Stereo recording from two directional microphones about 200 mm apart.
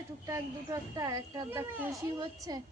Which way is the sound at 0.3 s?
15° right (ahead or behind).